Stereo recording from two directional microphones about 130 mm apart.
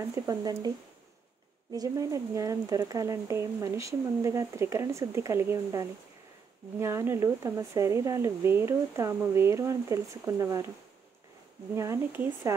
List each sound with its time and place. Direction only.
0.0 s speech: 25° right (ahead or behind)
1.7 s speech: 25° right (ahead or behind)
11.7 s speech: 20° right (ahead or behind)